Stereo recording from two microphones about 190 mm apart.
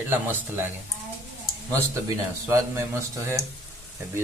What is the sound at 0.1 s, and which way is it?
Speech, 10° right (ahead or behind).